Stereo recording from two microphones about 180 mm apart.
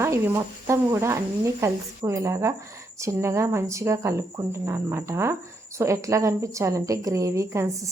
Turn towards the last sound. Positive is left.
turn(degrees=-15)  # may be behind; listen again after turning